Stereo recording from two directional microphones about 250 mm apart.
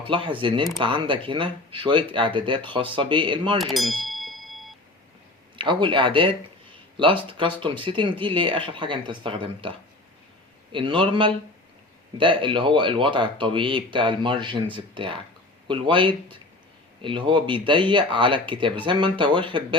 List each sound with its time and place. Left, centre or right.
0.1 s speech: centre
3.6 s a sound: centre
5.5 s speech: centre